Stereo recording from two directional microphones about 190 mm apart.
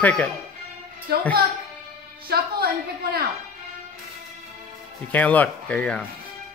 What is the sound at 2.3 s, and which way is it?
Speech, 55° right (ahead or behind).